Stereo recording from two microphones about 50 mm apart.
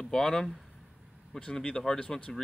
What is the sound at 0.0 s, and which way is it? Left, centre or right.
Speech, centre.